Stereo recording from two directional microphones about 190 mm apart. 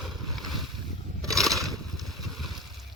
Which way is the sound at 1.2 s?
Centre (ahead or behind).